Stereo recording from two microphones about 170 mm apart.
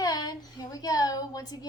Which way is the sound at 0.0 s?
20° left (ahead or behind).